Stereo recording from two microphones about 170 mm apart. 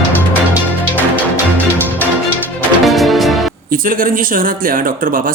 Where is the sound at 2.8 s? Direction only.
Centre (ahead or behind).